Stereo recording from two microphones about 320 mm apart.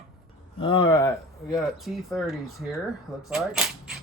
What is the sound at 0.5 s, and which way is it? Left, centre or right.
Speech, centre.